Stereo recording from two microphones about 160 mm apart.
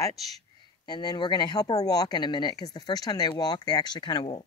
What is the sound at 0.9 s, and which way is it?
Speech, 25° left (ahead or behind).